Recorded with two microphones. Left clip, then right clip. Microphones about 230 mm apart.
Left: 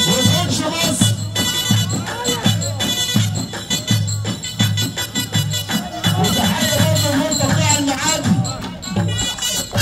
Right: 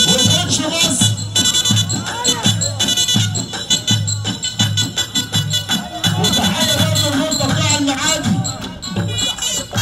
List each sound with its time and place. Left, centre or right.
0.0 s music: right